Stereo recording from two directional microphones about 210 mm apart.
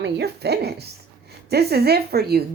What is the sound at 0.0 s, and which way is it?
Speech, 50° right (ahead or behind).